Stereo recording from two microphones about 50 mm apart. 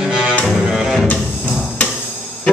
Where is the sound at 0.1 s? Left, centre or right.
Centre.